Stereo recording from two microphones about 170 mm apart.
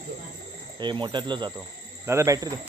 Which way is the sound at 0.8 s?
25° right (ahead or behind).